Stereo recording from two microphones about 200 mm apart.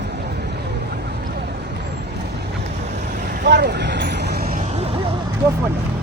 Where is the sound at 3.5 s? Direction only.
55° right (ahead or behind); by 5.1 s 30° right (ahead or behind).